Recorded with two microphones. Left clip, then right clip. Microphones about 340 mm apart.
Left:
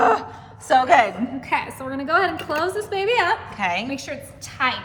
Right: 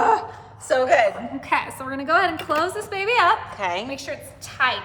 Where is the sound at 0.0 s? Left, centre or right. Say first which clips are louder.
Left 1 dB; centre.